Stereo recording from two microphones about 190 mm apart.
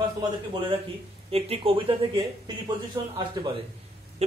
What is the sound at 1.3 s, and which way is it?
Speech, 30° right (ahead or behind).